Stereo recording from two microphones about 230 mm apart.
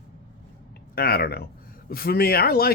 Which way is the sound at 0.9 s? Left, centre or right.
Left.